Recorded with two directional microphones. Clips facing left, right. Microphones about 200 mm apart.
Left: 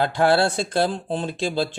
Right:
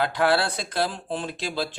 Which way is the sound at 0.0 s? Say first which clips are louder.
Left 4 dB; 30° left (ahead or behind).